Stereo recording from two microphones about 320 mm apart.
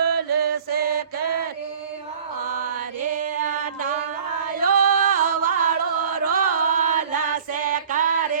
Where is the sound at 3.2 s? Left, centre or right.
Right.